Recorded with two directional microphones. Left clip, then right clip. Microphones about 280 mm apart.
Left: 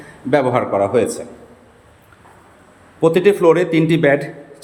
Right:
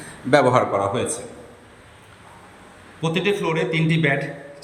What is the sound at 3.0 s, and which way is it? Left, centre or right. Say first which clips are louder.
A man's voice: left 9 dB; centre.